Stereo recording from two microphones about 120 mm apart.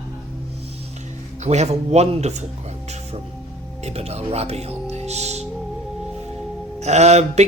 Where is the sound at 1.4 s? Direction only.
70° right (ahead or behind).